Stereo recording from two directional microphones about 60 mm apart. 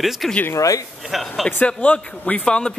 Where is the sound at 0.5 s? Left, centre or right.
Left.